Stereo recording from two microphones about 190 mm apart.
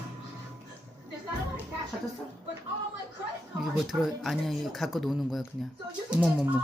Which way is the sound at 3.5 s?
Centre (ahead or behind).